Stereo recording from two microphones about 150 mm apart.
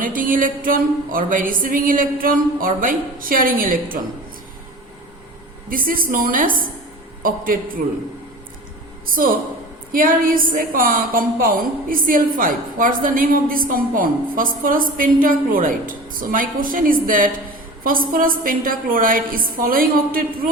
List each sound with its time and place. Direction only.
0.0 s a woman's voice: 65° right (ahead or behind)
5.6 s a woman's voice: 70° right (ahead or behind)
9.9 s a woman's voice: 65° right (ahead or behind)